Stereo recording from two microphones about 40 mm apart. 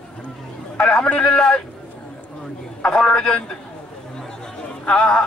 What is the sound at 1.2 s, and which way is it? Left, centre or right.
Speech, left.